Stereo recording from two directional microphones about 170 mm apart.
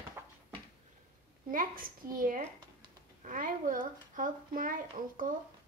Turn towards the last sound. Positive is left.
turn(degrees=-50)  # may be behind; listen again after turning